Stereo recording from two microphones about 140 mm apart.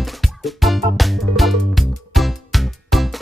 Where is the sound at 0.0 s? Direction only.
Centre (ahead or behind).